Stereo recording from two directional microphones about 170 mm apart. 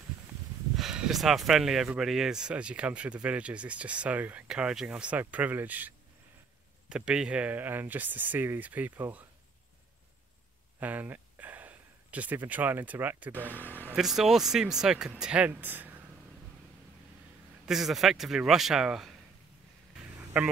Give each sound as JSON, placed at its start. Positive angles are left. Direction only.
{"t": 0.7, "sound": "speech", "side_deg": -5}
{"t": 10.8, "sound": "speech", "side_deg": -10}
{"t": 13.6, "sound": "speech", "side_deg": 10}
{"t": 13.8, "sound": "speech", "side_deg": 0}
{"t": 17.6, "sound": "speech", "side_deg": 0}
{"t": 20.4, "sound": "speech", "side_deg": -5}